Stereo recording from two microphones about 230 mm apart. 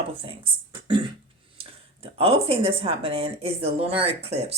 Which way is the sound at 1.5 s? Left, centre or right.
Right.